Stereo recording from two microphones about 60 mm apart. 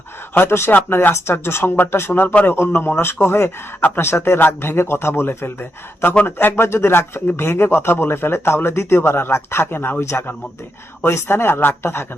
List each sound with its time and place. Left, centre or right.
0.4 s a man's voice: left
0.7 s speech: left
0.9 s a man's voice: left
3.8 s speech: left
4.0 s a man's voice: left
4.4 s a man's voice: left
10.0 s a man's voice: left